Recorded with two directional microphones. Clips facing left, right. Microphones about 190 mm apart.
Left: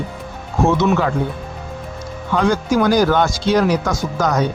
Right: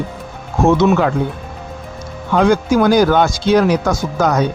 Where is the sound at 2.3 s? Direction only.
55° right (ahead or behind).